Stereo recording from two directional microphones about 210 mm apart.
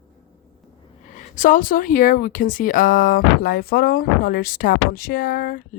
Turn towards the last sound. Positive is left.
turn(degrees=45)  # may be behind; listen again after turning